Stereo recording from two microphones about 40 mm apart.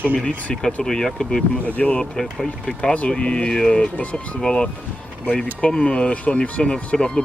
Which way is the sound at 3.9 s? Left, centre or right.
Left.